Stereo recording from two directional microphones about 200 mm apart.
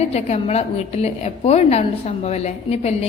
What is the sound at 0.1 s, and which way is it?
A woman's voice, 30° left (ahead or behind).